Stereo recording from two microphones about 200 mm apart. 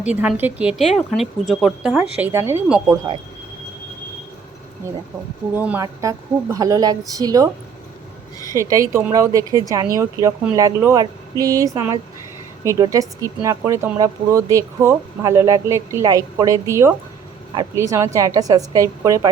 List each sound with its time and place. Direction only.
0.0 s speech: 5° right (ahead or behind)
5.5 s speech: 10° right (ahead or behind)
8.5 s speech: 15° right (ahead or behind)